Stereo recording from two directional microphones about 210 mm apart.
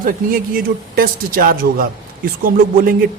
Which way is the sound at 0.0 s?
40° right (ahead or behind).